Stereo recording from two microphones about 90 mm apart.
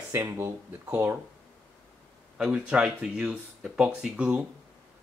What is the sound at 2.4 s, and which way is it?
Speech, 10° right (ahead or behind).